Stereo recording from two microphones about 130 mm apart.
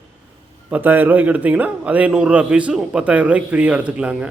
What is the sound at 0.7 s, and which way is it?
A man's voice, 15° right (ahead or behind).